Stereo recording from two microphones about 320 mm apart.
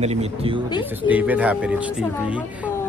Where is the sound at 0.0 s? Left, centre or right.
Centre.